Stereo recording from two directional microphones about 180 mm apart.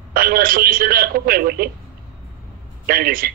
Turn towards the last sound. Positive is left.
turn(degrees=-55)  # may be behind; listen again after turning